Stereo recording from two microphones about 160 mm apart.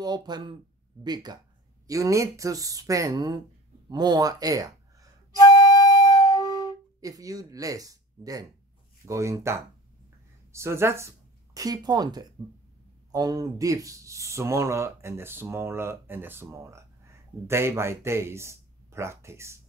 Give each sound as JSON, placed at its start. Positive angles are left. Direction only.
{"t": 0.0, "sound": "speech", "side_deg": -25}
{"t": 5.5, "sound": "flute", "side_deg": 25}
{"t": 7.0, "sound": "speech", "side_deg": -20}